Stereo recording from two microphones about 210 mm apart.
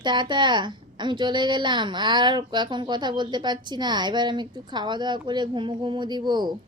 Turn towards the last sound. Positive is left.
turn(degrees=-20)  # may be behind; listen again after turning